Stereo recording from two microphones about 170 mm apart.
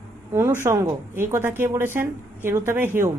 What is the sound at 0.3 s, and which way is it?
A woman's voice, 15° right (ahead or behind).